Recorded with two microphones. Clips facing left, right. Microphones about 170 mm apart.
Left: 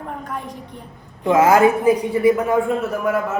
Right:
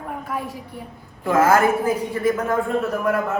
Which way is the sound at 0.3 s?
5° right (ahead or behind).